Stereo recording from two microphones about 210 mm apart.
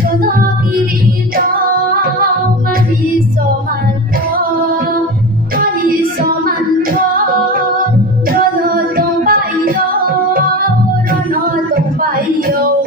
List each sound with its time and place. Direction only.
1.9 s music: 45° right (ahead or behind)
5.6 s music: 45° right (ahead or behind)
8.3 s a sound: 45° right (ahead or behind)